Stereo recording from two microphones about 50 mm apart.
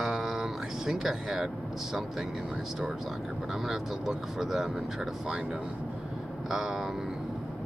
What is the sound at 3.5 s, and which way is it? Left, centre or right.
Speech, centre.